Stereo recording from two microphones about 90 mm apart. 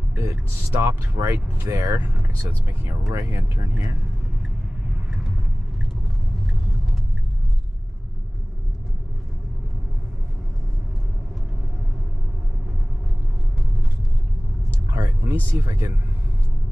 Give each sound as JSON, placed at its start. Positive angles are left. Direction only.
{"t": 0.1, "sound": "speech", "side_deg": -35}
{"t": 3.1, "sound": "speech", "side_deg": -35}
{"t": 15.2, "sound": "speech", "side_deg": -30}